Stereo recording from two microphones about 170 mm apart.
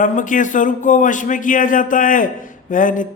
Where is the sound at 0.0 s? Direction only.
50° left (ahead or behind).